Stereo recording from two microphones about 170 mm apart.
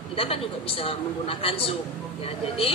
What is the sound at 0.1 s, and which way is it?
A woman's voice, 35° left (ahead or behind).